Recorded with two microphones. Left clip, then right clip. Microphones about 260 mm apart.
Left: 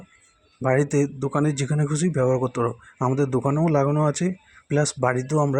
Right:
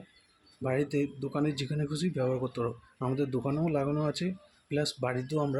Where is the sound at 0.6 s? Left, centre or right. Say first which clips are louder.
Left 9 dB; left.